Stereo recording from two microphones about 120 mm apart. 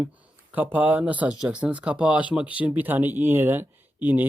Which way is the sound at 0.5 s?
15° right (ahead or behind).